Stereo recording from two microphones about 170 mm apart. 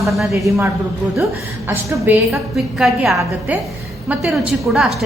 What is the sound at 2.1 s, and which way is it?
A woman's voice, 10° right (ahead or behind).